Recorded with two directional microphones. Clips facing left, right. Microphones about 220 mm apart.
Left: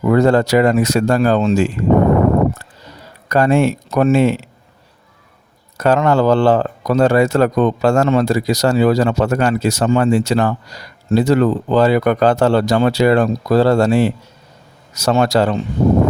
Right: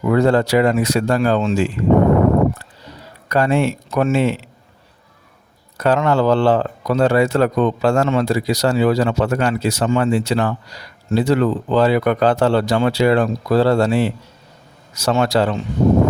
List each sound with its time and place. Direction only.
0.0 s speech: 45° left (ahead or behind)
3.2 s speech: 45° left (ahead or behind)
5.7 s speech: 45° left (ahead or behind)